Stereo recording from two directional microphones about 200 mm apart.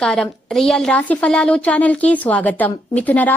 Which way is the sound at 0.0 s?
5° left (ahead or behind).